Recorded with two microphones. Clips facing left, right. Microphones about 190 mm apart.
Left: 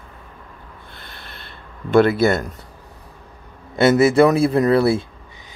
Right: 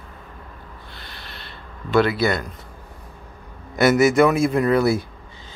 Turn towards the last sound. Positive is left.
turn(degrees=30)  # may be behind; listen again after turning